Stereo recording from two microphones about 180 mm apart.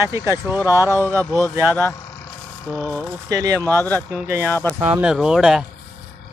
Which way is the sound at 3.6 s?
10° left (ahead or behind).